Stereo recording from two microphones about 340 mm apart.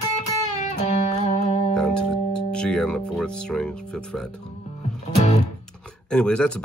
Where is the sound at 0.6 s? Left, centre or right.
Centre.